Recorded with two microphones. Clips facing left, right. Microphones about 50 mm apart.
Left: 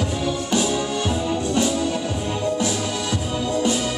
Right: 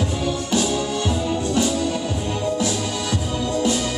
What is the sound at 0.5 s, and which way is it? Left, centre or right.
Music, centre.